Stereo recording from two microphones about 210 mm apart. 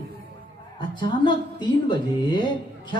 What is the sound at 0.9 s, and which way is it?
A woman's voice, 20° left (ahead or behind).